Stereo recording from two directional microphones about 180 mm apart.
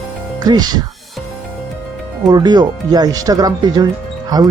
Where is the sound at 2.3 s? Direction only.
25° right (ahead or behind).